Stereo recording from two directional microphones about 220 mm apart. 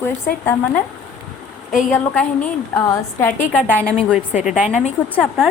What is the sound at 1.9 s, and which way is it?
A woman's voice, 10° left (ahead or behind).